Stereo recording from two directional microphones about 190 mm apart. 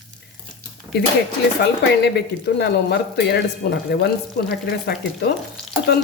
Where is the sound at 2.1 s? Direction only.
60° left (ahead or behind).